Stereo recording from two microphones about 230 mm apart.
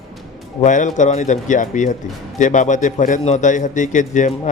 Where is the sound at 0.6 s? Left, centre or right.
Left.